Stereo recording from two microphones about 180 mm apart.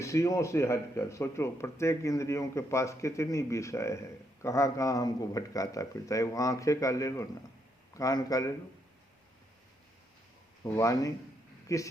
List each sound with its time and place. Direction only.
0.0 s a man's voice: 15° left (ahead or behind)
10.6 s speech: 15° left (ahead or behind)